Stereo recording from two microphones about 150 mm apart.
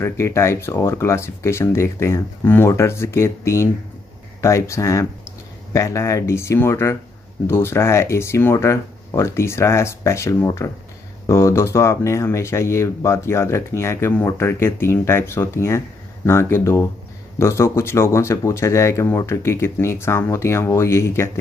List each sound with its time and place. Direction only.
0.0 s speech: 20° left (ahead or behind)